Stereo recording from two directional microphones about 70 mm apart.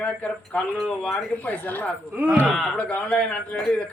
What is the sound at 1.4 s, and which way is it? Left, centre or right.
Speech, left.